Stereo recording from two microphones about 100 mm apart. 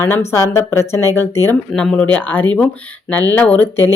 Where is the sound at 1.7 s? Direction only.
5° left (ahead or behind).